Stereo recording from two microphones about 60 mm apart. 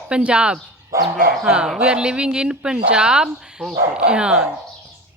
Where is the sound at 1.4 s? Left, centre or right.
Centre.